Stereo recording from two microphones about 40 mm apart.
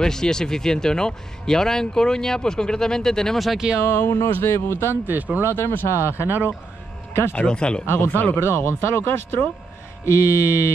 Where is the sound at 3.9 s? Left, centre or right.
Left.